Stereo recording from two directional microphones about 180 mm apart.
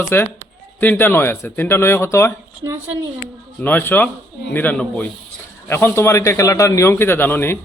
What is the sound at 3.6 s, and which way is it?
Speech, 10° left (ahead or behind).